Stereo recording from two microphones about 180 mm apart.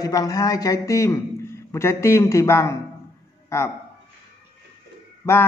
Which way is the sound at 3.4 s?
15° left (ahead or behind).